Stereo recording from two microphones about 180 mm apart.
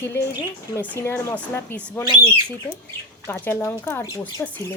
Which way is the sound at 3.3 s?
10° left (ahead or behind).